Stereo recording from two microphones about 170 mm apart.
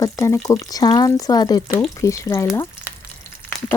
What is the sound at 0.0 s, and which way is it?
Speech, 20° left (ahead or behind).